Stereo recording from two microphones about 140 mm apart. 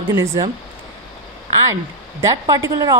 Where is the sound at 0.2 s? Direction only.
20° right (ahead or behind).